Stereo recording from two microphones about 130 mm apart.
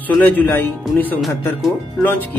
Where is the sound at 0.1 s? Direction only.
10° left (ahead or behind).